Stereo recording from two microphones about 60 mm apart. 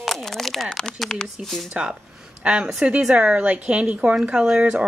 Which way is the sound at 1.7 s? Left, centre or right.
Centre.